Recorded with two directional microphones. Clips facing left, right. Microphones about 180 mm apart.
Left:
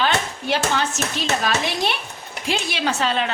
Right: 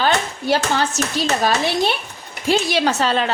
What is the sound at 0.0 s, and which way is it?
Speech, 35° right (ahead or behind).